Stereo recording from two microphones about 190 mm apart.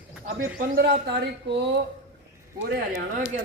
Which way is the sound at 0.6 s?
60° right (ahead or behind).